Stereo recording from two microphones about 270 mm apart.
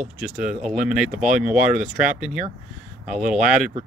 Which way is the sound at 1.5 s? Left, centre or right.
Right.